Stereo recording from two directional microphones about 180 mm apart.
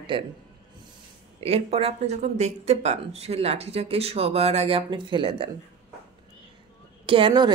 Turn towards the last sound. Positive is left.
turn(degrees=-25)  # may be behind; listen again after turning